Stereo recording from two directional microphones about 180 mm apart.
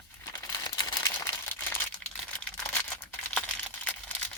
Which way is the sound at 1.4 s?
10° left (ahead or behind).